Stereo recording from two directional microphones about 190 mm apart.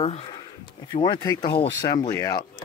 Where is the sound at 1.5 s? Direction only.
55° left (ahead or behind).